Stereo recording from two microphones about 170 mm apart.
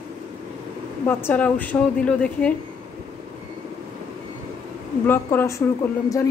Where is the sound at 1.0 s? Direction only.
10° left (ahead or behind).